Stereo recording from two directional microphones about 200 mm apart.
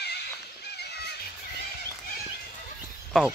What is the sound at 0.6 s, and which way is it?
Children playing, 55° left (ahead or behind).